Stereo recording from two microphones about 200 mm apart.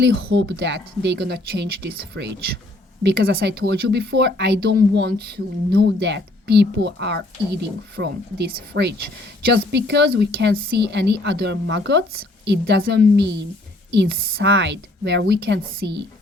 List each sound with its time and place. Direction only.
0.0 s speech: 60° right (ahead or behind)